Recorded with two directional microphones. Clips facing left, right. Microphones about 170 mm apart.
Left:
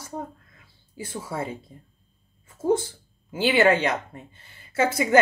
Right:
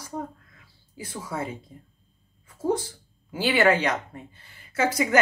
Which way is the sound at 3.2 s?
25° left (ahead or behind).